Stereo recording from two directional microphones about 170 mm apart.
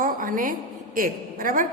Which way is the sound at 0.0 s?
55° right (ahead or behind).